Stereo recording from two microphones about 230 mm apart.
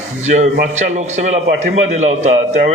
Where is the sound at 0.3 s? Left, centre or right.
Right.